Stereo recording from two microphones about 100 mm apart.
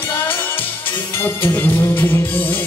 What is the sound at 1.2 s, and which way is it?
Music, 20° left (ahead or behind).